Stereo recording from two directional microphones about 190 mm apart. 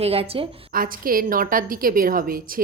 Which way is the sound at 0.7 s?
50° right (ahead or behind).